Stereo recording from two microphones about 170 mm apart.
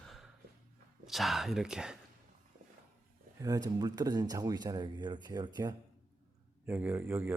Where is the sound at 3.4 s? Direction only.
20° right (ahead or behind).